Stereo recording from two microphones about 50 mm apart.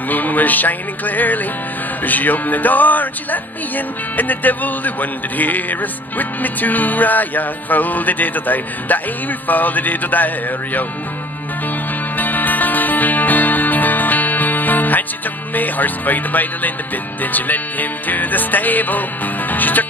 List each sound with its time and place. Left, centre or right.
0.1 s music: left
12.2 s music: left